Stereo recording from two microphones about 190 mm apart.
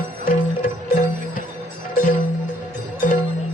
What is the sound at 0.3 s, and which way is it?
Music, 45° left (ahead or behind).